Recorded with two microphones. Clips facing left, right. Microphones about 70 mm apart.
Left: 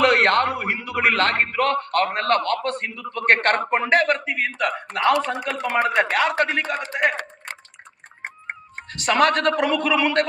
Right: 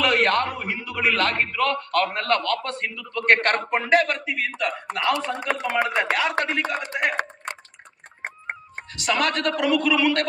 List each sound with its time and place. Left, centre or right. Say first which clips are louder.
0.0 s a man's voice: left 3 dB; left
5.8 s a man's voice: left 6 dB; left
8.9 s a woman's voice: left 5 dB; left